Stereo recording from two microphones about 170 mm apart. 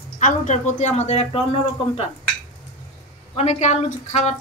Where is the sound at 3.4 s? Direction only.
40° left (ahead or behind).